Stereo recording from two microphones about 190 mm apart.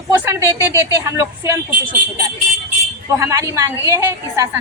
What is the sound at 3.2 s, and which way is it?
A woman's voice, 15° right (ahead or behind).